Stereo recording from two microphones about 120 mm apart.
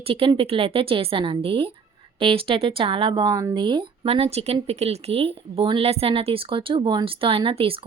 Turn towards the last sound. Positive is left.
turn(degrees=-50)  # may be behind; listen again after turning